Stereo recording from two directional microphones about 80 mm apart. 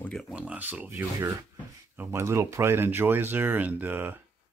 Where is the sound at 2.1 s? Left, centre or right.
Right.